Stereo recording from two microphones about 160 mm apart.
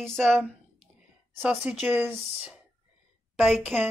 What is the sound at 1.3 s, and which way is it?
Speech, 10° right (ahead or behind).